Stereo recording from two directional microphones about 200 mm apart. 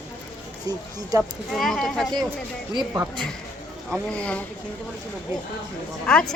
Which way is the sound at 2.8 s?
15° right (ahead or behind).